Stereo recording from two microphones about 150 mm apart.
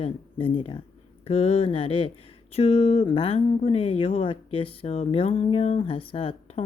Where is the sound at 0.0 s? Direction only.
35° left (ahead or behind).